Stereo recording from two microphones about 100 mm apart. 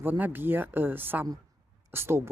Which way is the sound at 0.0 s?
20° right (ahead or behind).